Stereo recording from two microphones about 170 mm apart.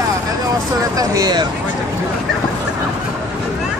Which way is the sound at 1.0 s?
20° right (ahead or behind).